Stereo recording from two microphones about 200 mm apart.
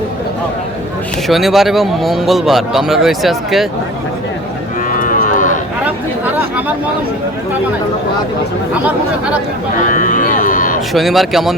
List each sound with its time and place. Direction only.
1.3 s a man's voice: centre (ahead or behind)
4.9 s cattle: 40° left (ahead or behind)
9.8 s speech: 40° left (ahead or behind)
10.9 s a man's voice: centre (ahead or behind)